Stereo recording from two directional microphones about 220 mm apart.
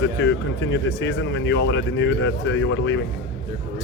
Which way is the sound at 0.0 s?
55° left (ahead or behind).